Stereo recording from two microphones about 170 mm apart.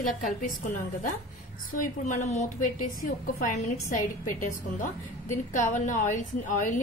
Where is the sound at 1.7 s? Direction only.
50° left (ahead or behind).